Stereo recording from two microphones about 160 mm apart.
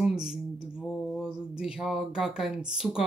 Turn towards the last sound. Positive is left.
turn(degrees=-5)  # may be behind; listen again after turning